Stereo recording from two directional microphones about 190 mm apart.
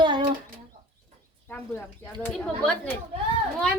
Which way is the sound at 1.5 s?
10° left (ahead or behind).